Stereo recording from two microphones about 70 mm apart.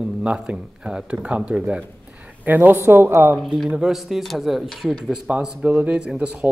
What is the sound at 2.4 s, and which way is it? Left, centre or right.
Speech, right.